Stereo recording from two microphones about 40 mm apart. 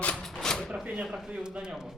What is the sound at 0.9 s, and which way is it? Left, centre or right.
Speech, centre.